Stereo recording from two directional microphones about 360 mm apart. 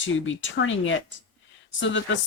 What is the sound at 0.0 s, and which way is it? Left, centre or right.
Speech, left.